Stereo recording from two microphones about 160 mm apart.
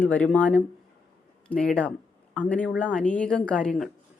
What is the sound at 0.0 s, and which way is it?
Speech, 10° left (ahead or behind).